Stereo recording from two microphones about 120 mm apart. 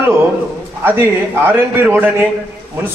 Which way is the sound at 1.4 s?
15° right (ahead or behind).